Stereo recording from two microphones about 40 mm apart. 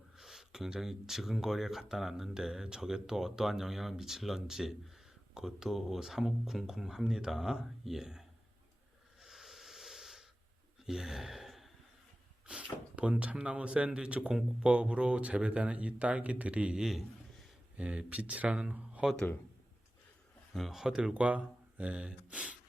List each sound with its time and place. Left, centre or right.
0.2 s speech: centre
9.2 s wheeze: centre
10.8 s gasp: centre
12.5 s a sound: right
13.0 s speech: right
20.7 s speech: centre
21.1 s speech: right